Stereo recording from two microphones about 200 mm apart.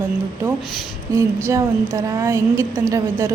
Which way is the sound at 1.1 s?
15° right (ahead or behind).